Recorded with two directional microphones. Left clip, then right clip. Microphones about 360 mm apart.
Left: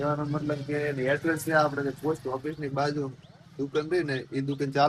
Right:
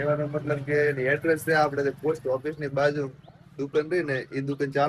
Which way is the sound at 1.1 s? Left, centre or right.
Centre.